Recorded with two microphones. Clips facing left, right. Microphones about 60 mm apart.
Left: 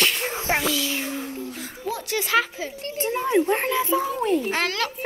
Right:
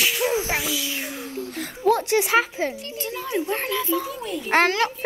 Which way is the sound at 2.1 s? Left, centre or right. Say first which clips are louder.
Right 3 dB; right.